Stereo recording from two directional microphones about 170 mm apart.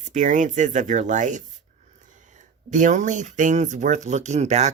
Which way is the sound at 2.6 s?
45° right (ahead or behind).